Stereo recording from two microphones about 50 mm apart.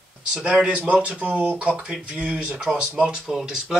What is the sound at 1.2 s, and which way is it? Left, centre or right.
Speech, right.